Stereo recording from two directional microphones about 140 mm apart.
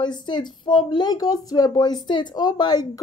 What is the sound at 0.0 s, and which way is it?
Speech, 30° left (ahead or behind).